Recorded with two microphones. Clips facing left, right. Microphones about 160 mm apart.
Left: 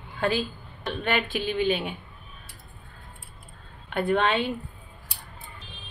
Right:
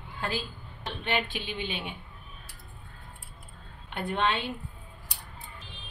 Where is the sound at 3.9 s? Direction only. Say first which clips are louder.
Left 5 dB; 50° left (ahead or behind).